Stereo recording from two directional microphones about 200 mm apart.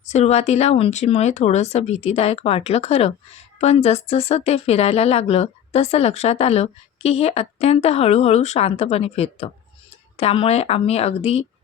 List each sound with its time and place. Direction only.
0.0 s speech: 35° left (ahead or behind)